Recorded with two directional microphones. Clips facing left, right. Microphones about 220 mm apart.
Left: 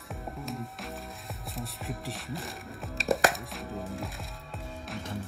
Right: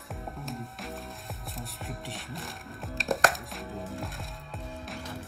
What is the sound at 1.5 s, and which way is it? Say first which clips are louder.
Speech: left 4 dB; centre (ahead or behind).